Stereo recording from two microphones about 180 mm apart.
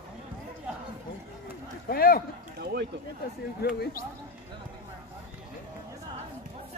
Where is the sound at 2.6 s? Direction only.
65° right (ahead or behind).